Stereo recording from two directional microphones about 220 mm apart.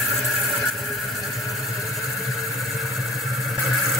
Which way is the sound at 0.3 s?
Centre (ahead or behind).